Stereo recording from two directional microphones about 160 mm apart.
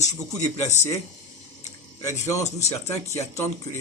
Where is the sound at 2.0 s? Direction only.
20° left (ahead or behind).